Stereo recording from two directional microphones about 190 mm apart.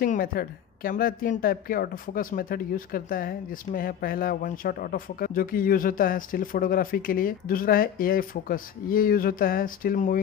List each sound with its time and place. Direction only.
0.0 s a woman's voice: 50° left (ahead or behind)